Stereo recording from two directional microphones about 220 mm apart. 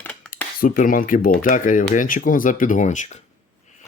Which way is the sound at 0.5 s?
40° left (ahead or behind).